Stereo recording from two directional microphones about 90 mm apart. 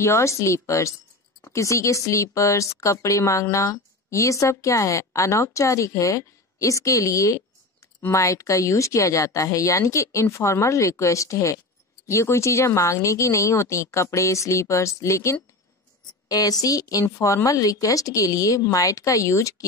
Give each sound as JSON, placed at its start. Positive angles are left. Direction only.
{"t": 0.0, "sound": "a woman's voice", "side_deg": 30}